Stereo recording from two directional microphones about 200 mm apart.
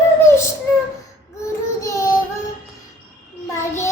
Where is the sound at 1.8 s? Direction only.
15° left (ahead or behind).